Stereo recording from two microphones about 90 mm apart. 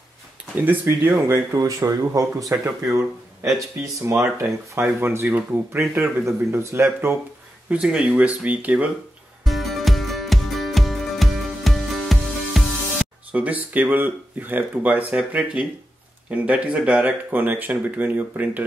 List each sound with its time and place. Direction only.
0.6 s speech: 20° right (ahead or behind)
1.1 s speech: 35° right (ahead or behind)
7.7 s speech: 10° right (ahead or behind)
9.4 s music: centre (ahead or behind)
13.3 s speech: 15° right (ahead or behind)